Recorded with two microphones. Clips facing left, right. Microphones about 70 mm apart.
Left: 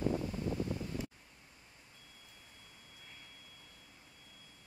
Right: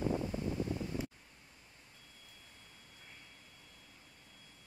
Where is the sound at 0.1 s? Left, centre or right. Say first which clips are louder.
Even; right.